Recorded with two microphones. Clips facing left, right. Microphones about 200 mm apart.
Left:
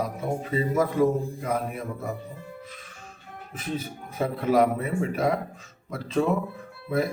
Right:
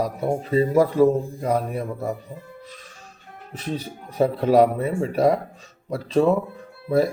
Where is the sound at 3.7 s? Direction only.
35° right (ahead or behind).